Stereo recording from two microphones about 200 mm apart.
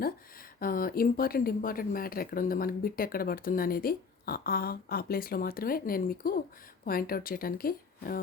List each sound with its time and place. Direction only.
0.6 s speech: 45° left (ahead or behind)